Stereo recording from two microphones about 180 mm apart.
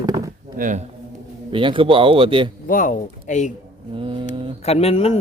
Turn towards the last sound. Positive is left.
turn(degrees=35)  # may be behind; listen again after turning